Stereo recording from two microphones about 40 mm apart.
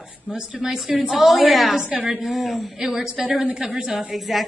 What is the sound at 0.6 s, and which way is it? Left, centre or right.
A man's voice, centre.